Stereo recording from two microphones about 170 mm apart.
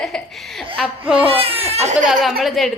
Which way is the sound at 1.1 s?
35° right (ahead or behind).